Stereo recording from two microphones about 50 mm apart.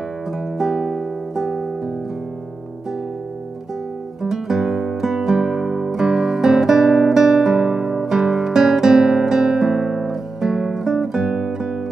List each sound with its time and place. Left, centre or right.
0.6 s music: centre
4.2 s guitar: centre